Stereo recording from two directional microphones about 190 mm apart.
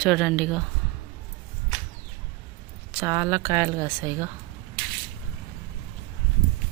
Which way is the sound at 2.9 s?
15° right (ahead or behind).